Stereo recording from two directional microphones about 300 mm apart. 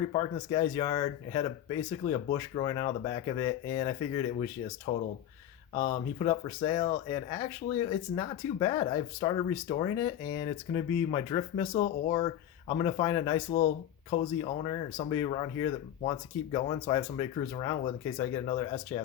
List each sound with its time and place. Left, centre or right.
0.1 s speech: centre